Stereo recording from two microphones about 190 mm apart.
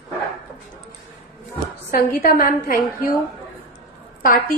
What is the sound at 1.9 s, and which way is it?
A woman's voice, 50° left (ahead or behind).